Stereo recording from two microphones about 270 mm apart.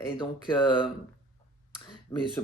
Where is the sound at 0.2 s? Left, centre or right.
Centre.